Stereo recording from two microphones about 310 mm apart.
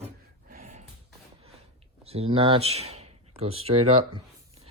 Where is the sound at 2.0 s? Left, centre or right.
Centre.